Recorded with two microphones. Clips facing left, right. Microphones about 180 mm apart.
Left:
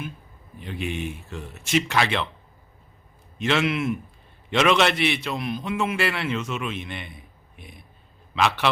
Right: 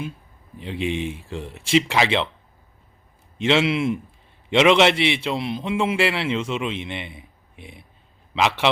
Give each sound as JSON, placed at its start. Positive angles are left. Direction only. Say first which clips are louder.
{"t": 0.8, "sound": "speech", "louder": "right 5 dB", "side_deg": -90}
{"t": 1.0, "sound": "a man's voice", "louder": "right 4 dB", "side_deg": -30}
{"t": 3.3, "sound": "a man's voice", "louder": "right 4 dB", "side_deg": -25}
{"t": 8.4, "sound": "a man's voice", "louder": "right 2 dB", "side_deg": -20}